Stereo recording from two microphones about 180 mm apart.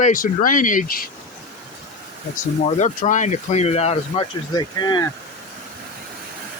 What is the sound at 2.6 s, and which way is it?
Speech, 40° left (ahead or behind).